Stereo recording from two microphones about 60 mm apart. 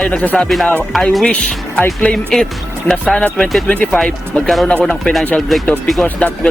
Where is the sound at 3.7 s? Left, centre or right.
Left.